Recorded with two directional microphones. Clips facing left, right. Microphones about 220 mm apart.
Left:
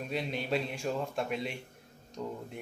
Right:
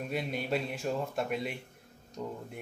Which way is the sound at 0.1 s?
5° right (ahead or behind).